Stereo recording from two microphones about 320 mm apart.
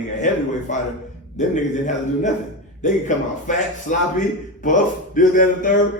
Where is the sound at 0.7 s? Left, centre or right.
Left.